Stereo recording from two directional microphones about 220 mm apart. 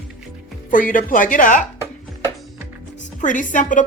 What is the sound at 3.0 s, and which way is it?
Speech, 35° left (ahead or behind).